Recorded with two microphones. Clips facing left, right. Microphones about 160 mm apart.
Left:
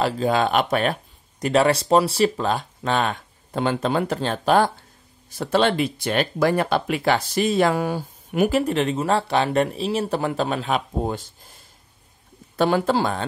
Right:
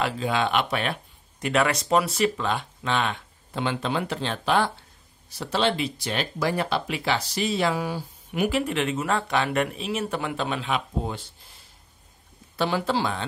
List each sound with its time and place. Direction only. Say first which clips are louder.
0.0 s speech: left 5 dB; 40° left (ahead or behind)
1.4 s speech: left 5 dB; 30° left (ahead or behind)
12.5 s speech: left 5 dB; 50° left (ahead or behind)